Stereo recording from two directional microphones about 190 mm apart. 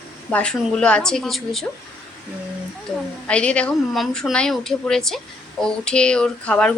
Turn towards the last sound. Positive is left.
turn(degrees=5)  # may be behind; listen again after turning